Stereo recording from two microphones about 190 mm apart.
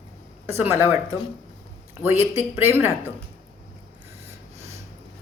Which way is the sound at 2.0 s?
15° right (ahead or behind).